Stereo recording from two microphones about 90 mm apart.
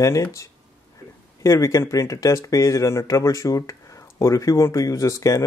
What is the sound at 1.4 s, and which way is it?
Speech, 35° left (ahead or behind).